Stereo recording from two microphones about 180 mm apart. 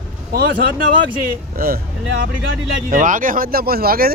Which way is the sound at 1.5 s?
55° right (ahead or behind).